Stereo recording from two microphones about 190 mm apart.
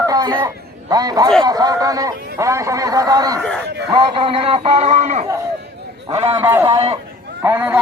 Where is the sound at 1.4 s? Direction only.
20° right (ahead or behind).